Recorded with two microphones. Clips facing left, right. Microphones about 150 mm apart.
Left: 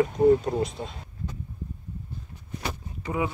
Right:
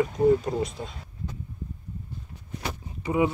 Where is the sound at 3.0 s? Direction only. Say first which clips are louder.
Right 5 dB; 15° right (ahead or behind).